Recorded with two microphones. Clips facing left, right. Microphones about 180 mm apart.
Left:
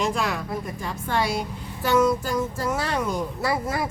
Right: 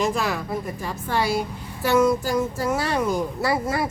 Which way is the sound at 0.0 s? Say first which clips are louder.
Right 2 dB; centre (ahead or behind).